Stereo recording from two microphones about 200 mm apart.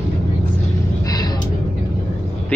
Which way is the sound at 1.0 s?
20° left (ahead or behind).